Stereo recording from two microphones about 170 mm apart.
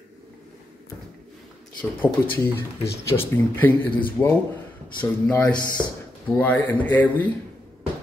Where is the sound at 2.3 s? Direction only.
10° left (ahead or behind).